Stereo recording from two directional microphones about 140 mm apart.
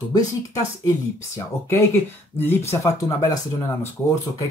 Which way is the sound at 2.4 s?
15° left (ahead or behind).